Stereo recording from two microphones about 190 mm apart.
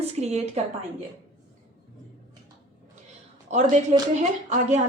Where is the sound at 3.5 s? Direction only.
40° right (ahead or behind).